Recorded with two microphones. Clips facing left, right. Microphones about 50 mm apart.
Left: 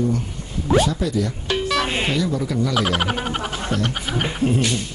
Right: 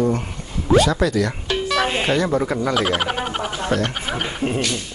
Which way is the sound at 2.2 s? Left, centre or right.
Right.